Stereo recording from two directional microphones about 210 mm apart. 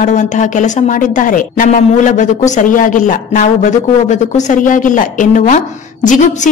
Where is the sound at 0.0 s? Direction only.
35° left (ahead or behind).